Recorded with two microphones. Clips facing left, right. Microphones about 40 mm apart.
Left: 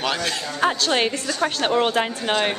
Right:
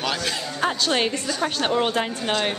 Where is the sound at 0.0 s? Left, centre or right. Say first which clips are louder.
Left 2 dB; centre.